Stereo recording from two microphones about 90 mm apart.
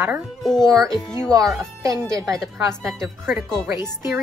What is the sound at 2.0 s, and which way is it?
Speech, 35° right (ahead or behind).